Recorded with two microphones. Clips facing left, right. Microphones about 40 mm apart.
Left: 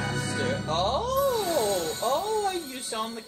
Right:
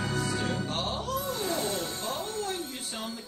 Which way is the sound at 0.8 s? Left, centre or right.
Centre.